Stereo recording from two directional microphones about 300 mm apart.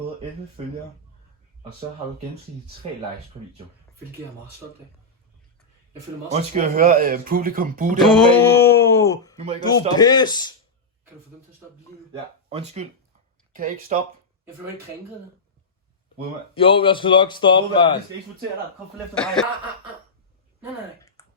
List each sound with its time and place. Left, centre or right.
6.3 s speech: right
8.4 s a sound: centre
9.6 s a man's voice: centre
12.5 s speech: centre
16.6 s a man's voice: centre
19.1 s speech: centre